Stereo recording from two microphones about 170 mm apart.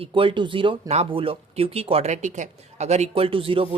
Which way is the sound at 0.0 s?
30° right (ahead or behind).